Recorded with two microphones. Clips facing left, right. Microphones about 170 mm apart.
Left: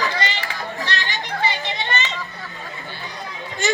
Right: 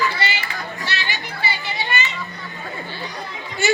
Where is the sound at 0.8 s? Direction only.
10° right (ahead or behind).